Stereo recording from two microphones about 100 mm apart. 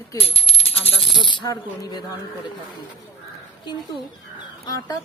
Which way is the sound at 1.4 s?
40° left (ahead or behind).